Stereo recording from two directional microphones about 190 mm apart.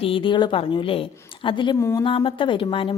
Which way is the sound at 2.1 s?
25° left (ahead or behind).